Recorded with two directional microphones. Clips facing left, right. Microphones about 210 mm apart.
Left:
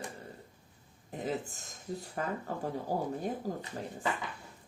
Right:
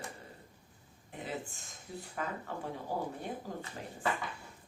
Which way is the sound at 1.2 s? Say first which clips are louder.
Left 5 dB; 40° left (ahead or behind).